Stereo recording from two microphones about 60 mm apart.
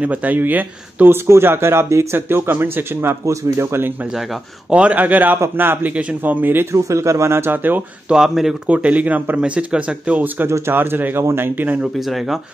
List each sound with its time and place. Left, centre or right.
0.0 s speech: right
3.3 s speech: right
4.1 s speech: centre
4.7 s speech: right
6.6 s speech: right
8.1 s speech: centre
8.6 s speech: right
10.2 s speech: right
12.0 s speech: centre